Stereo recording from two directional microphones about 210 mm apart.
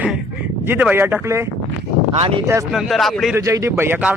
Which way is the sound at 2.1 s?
25° right (ahead or behind).